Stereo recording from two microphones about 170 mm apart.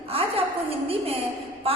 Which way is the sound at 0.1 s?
35° right (ahead or behind).